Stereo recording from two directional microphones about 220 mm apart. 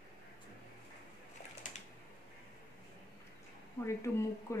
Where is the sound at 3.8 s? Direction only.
10° left (ahead or behind).